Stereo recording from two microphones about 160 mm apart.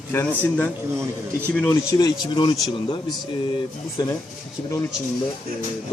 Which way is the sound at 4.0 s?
25° left (ahead or behind).